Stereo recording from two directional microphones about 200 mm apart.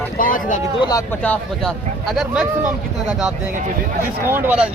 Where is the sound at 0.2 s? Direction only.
40° left (ahead or behind).